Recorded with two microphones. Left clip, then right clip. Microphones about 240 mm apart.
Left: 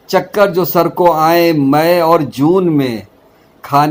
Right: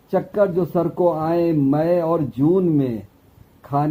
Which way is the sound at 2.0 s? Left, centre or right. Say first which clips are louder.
Left 9 dB; left.